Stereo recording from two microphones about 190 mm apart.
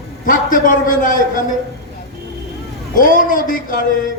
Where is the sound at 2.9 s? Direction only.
45° left (ahead or behind).